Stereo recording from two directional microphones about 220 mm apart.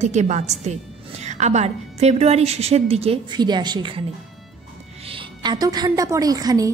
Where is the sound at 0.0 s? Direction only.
30° right (ahead or behind).